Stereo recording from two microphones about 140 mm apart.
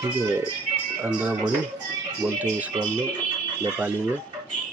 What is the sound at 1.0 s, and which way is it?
Speech, 10° right (ahead or behind).